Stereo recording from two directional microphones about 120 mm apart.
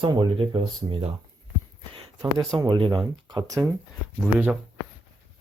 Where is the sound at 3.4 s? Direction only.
30° right (ahead or behind).